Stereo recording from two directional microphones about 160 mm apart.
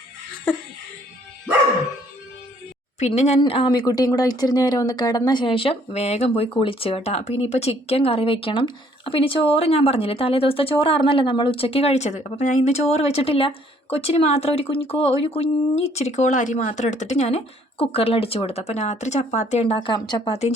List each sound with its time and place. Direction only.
0.5 s speech: 10° left (ahead or behind)
3.0 s speech: 45° left (ahead or behind)